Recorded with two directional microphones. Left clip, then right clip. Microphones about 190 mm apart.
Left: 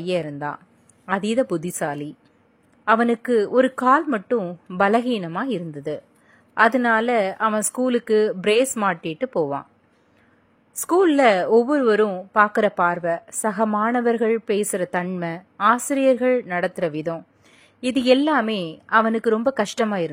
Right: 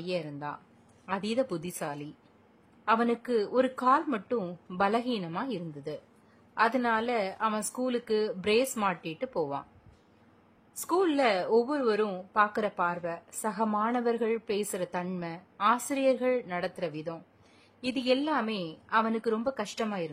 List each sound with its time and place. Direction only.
0.0 s a woman's voice: 30° left (ahead or behind)
10.7 s a woman's voice: 25° left (ahead or behind)